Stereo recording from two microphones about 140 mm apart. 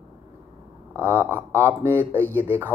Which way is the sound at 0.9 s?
15° right (ahead or behind).